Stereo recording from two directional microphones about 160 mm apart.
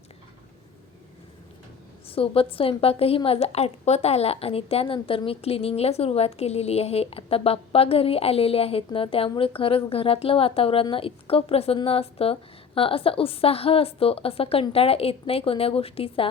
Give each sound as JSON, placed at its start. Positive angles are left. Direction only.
{"t": 2.0, "sound": "a woman's voice", "side_deg": 35}